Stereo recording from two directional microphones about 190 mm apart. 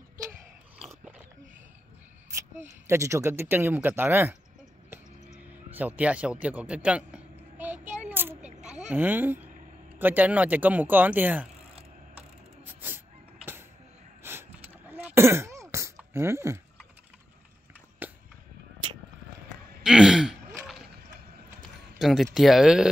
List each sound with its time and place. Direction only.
0.7 s dog: 5° right (ahead or behind)
2.6 s speech: 15° right (ahead or behind)
5.7 s speech: 10° right (ahead or behind)
6.4 s a sound: 5° right (ahead or behind)
8.6 s speech: 5° right (ahead or behind)
12.2 s mechanisms: 10° right (ahead or behind)
14.2 s a sound: 10° right (ahead or behind)
18.0 s a sound: 10° right (ahead or behind)
19.8 s throat clearing: 5° right (ahead or behind)
21.9 s speech: centre (ahead or behind)